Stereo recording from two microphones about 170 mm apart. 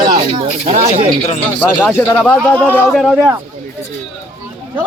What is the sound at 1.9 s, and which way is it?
A man's voice, 10° left (ahead or behind).